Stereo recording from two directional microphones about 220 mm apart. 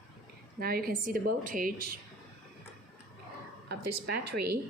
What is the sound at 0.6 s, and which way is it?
A woman's voice, 40° right (ahead or behind).